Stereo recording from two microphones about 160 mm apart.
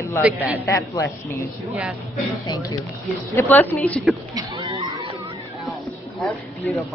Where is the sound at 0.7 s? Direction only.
15° left (ahead or behind).